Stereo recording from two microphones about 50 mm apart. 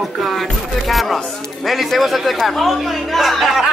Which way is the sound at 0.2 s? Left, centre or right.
Centre.